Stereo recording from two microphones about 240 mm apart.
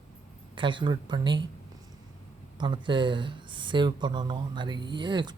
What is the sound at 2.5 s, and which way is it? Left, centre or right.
Speech, centre.